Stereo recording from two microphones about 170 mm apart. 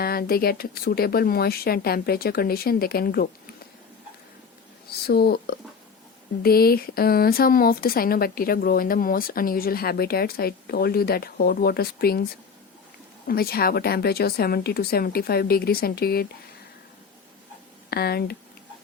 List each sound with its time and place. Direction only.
0.0 s speech: 65° left (ahead or behind)
4.9 s speech: 65° left (ahead or behind)
13.2 s speech: 60° left (ahead or behind)
17.9 s speech: 65° left (ahead or behind)